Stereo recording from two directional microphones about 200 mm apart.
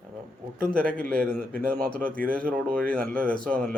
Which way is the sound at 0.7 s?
5° left (ahead or behind).